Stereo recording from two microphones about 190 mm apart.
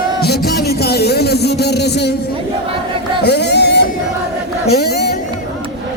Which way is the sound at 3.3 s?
60° left (ahead or behind).